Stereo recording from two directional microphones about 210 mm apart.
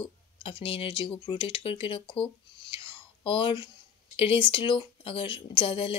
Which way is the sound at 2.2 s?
25° left (ahead or behind).